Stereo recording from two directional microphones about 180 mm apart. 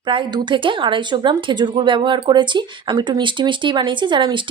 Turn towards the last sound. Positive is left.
turn(degrees=-25)  # may be behind; listen again after turning